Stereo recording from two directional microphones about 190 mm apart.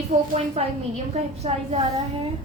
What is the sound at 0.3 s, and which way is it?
A woman's voice, 35° right (ahead or behind).